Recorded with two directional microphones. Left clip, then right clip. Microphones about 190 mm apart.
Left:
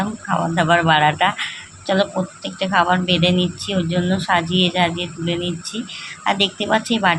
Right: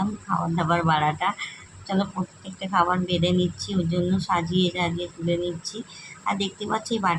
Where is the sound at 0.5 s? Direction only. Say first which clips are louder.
Left 8 dB; 15° left (ahead or behind).